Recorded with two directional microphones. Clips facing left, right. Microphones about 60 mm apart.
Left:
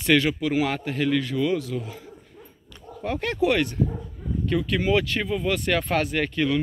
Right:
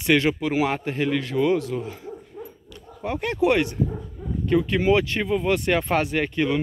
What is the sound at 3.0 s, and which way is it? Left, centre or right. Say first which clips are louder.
Speech: right 1 dB; centre.